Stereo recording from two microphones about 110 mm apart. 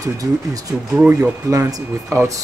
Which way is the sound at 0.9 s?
10° right (ahead or behind).